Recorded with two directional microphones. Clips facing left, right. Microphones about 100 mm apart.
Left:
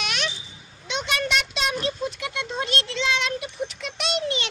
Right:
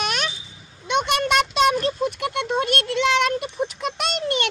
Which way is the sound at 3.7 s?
45° right (ahead or behind).